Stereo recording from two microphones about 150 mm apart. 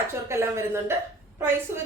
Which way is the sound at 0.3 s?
15° right (ahead or behind).